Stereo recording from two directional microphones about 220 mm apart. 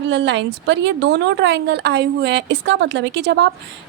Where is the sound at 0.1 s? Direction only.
50° right (ahead or behind).